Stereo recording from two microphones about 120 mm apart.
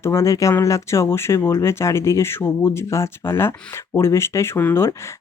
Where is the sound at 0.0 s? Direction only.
20° left (ahead or behind).